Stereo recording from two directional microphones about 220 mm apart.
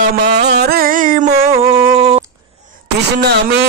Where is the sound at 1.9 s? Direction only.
25° right (ahead or behind).